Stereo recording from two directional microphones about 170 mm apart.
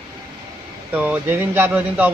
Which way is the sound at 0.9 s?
10° right (ahead or behind).